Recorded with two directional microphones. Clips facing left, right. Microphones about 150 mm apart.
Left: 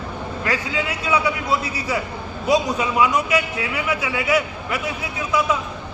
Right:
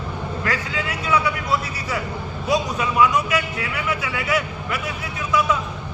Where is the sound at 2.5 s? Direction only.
20° left (ahead or behind).